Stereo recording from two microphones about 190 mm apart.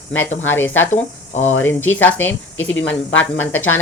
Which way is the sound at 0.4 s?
10° left (ahead or behind).